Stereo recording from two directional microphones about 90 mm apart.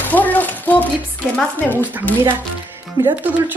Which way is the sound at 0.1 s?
20° left (ahead or behind).